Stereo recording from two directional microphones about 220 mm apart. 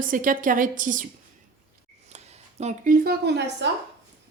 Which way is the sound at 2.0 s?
30° right (ahead or behind).